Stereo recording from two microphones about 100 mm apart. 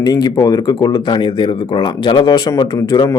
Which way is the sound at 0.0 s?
40° left (ahead or behind).